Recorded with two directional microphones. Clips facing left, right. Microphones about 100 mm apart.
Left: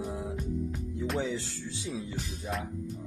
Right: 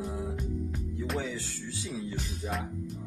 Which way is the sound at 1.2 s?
25° left (ahead or behind).